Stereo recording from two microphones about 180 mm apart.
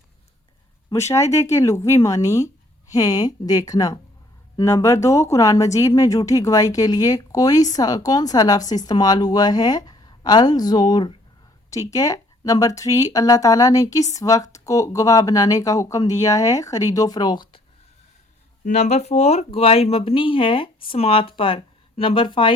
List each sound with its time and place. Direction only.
0.9 s speech: 15° left (ahead or behind)
18.6 s speech: 40° left (ahead or behind)